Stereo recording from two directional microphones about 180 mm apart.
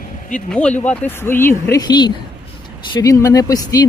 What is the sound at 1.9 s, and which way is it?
Speech, 25° left (ahead or behind).